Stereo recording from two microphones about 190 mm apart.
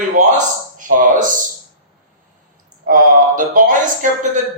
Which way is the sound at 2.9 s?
45° right (ahead or behind).